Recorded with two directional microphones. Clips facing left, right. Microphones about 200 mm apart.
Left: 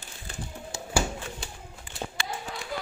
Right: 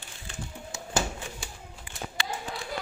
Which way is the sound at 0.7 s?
35° left (ahead or behind).